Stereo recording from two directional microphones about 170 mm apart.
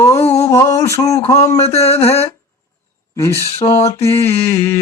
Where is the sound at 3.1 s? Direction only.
15° left (ahead or behind).